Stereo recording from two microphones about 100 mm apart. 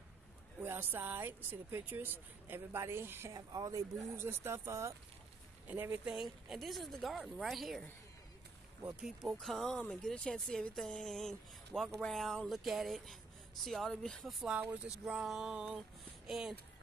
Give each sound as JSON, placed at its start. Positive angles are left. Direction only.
{"t": 0.6, "sound": "speech", "side_deg": -20}
{"t": 3.3, "sound": "speech", "side_deg": -35}
{"t": 4.2, "sound": "speech", "side_deg": -25}
{"t": 5.7, "sound": "a sound", "side_deg": -15}
{"t": 6.1, "sound": "speech", "side_deg": 0}
{"t": 9.0, "sound": "speech", "side_deg": 0}
{"t": 14.4, "sound": "a sound", "side_deg": -10}
{"t": 16.3, "sound": "speech", "side_deg": -5}